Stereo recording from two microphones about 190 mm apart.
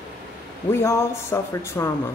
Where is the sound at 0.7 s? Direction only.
15° left (ahead or behind).